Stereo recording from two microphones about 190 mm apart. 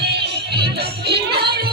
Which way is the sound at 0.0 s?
60° right (ahead or behind).